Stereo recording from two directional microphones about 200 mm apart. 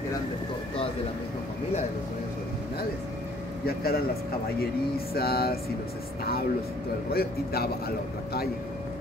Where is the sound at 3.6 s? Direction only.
50° left (ahead or behind).